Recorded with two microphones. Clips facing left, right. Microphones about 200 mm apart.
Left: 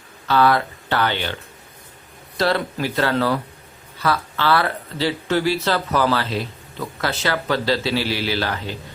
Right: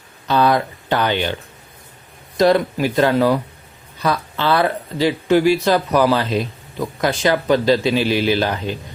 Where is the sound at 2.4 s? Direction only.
15° right (ahead or behind).